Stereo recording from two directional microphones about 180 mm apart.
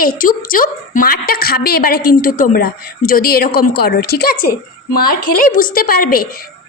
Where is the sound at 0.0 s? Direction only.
50° left (ahead or behind).